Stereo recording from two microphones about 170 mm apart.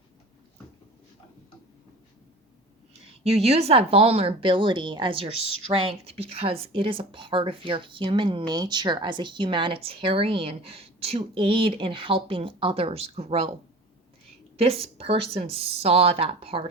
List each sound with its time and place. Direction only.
3.2 s speech: 35° right (ahead or behind)
14.5 s speech: 35° right (ahead or behind)